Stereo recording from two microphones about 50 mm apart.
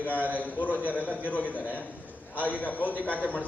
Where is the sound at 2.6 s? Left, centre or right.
Left.